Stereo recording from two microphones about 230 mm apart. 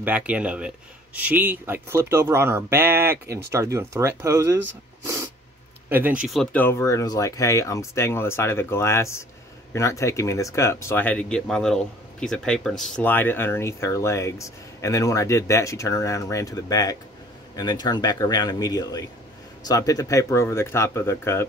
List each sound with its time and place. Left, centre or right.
0.0 s speech: centre
5.0 s cat: centre
5.9 s speech: centre